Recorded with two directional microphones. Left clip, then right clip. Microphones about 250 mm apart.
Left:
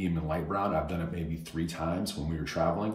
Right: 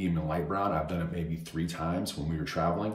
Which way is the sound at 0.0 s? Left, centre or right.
Centre.